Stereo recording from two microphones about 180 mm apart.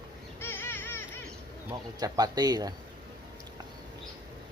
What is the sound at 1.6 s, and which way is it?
Speech, 20° right (ahead or behind).